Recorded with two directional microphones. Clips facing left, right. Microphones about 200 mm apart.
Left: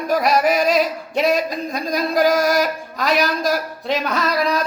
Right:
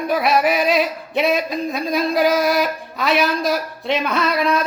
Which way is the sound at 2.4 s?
45° left (ahead or behind).